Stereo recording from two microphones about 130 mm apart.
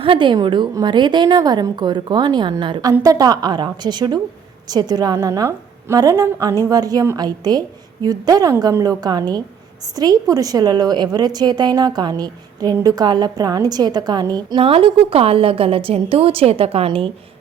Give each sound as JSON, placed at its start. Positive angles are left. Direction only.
{"t": 0.0, "sound": "a woman's voice", "side_deg": -40}
{"t": 14.6, "sound": "a woman's voice", "side_deg": -45}